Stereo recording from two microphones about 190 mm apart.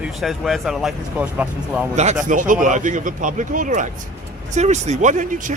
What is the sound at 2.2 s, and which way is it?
A man's voice, 40° right (ahead or behind).